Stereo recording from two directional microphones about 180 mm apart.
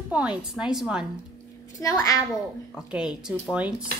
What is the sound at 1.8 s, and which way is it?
Speech, 20° left (ahead or behind).